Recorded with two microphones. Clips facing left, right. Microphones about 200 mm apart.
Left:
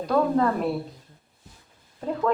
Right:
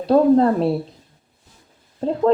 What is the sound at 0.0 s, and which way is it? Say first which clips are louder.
Speech: right 8 dB; 30° right (ahead or behind).